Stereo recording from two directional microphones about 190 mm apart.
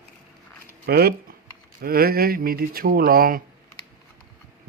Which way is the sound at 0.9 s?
55° right (ahead or behind).